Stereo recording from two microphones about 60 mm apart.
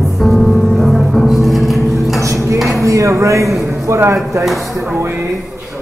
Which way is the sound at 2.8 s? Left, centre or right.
Right.